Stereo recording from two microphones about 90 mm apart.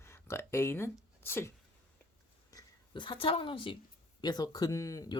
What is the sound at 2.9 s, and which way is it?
Speech, 65° left (ahead or behind).